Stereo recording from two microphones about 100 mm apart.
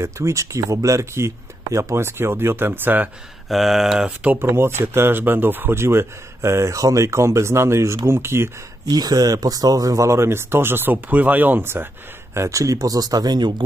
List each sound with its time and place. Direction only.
0.0 s speech: 30° right (ahead or behind)
3.4 s speech: centre (ahead or behind); by 8.5 s 25° right (ahead or behind)
8.8 s speech: 40° right (ahead or behind)